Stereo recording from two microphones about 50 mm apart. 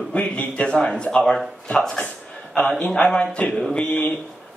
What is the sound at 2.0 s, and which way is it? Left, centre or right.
A man's voice, left.